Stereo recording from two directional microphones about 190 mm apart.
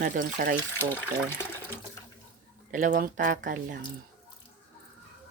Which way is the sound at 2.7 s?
45° right (ahead or behind).